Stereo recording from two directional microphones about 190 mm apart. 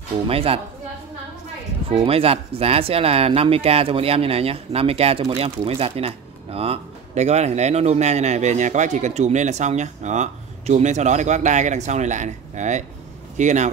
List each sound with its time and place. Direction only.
0.3 s speech: 30° right (ahead or behind)
2.0 s speech: 30° right (ahead or behind)